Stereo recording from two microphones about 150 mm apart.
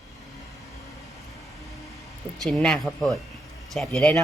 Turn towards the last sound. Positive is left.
turn(degrees=0)  # may be behind; listen again after turning